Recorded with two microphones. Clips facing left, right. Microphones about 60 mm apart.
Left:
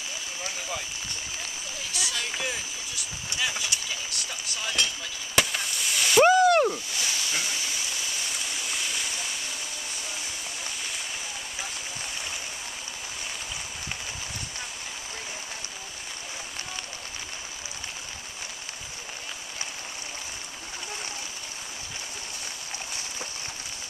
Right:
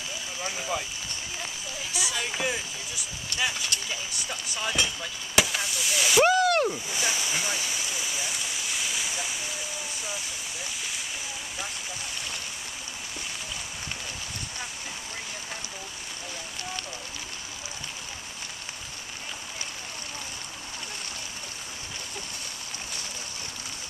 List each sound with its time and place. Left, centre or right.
0.4 s speech: centre
2.0 s speech: centre
3.7 s a sound: centre
4.3 s speech: centre
6.4 s splash: centre
6.9 s speech: right
7.4 s stream: centre
8.6 s a sound: centre